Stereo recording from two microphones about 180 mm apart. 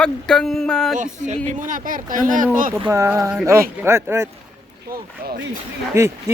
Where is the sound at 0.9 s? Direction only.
45° right (ahead or behind).